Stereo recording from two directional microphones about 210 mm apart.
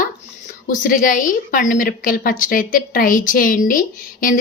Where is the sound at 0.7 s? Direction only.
40° left (ahead or behind).